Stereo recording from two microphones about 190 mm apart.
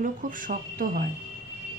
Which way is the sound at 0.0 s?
45° right (ahead or behind).